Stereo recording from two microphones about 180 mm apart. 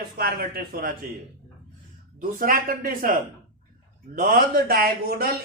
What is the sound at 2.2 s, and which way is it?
A man's voice, 50° right (ahead or behind).